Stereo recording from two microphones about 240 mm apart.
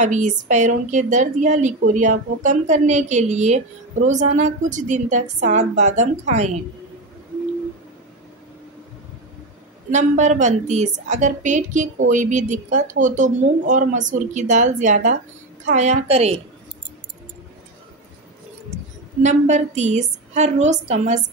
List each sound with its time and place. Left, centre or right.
0.0 s a woman's voice: right
9.8 s a woman's voice: right
19.2 s a woman's voice: right